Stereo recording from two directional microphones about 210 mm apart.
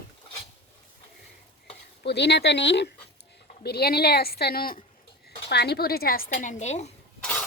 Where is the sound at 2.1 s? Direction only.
55° left (ahead or behind); by 6.9 s 30° left (ahead or behind).